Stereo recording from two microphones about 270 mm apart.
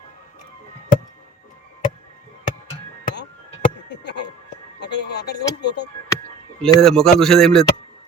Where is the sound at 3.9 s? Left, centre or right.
Left.